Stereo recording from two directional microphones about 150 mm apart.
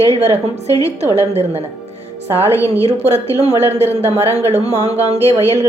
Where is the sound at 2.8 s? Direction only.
45° right (ahead or behind).